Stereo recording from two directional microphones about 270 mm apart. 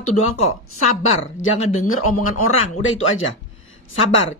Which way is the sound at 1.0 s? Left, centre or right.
Left.